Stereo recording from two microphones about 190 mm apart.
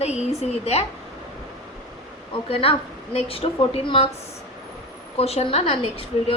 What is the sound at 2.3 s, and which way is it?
A woman's voice, 30° left (ahead or behind).